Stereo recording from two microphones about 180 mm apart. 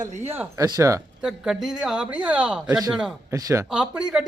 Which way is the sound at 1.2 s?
5° right (ahead or behind).